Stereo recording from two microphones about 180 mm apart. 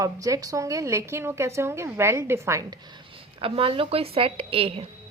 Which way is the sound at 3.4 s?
30° right (ahead or behind).